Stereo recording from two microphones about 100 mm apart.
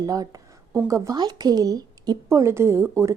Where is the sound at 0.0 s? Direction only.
35° right (ahead or behind).